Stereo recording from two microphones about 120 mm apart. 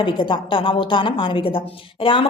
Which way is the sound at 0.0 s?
45° left (ahead or behind).